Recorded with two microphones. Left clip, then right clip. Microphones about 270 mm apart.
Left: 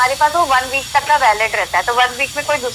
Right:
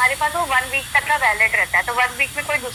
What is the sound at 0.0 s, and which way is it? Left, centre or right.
Speech, left.